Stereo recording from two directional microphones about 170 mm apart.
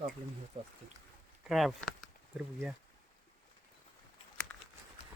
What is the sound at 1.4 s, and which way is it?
Speech, centre (ahead or behind).